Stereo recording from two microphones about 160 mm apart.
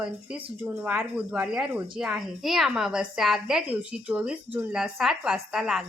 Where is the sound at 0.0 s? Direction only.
5° right (ahead or behind).